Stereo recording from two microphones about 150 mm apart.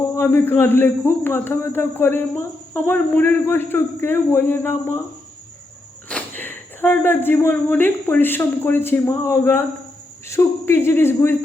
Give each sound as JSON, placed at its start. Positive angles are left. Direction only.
{"t": 0.2, "sound": "speech", "side_deg": 15}
{"t": 6.1, "sound": "speech", "side_deg": 10}